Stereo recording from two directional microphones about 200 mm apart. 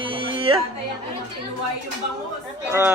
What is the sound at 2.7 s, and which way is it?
Speech, 10° right (ahead or behind).